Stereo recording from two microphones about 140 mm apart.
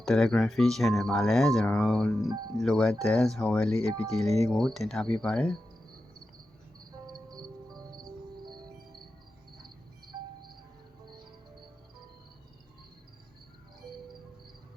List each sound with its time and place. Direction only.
0.0 s speech: 5° left (ahead or behind)
7.3 s music: 5° left (ahead or behind)
8.4 s music: 30° right (ahead or behind)
10.1 s music: 35° right (ahead or behind)